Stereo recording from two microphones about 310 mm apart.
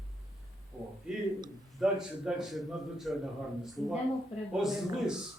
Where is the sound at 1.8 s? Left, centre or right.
Centre.